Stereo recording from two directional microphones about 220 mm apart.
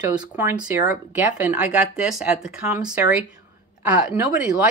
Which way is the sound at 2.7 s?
10° right (ahead or behind).